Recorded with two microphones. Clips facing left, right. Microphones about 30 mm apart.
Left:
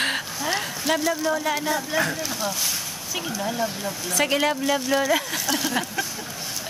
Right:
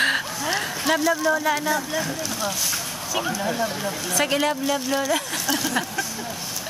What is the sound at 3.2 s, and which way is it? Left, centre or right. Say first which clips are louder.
Speech: right 1 dB; centre.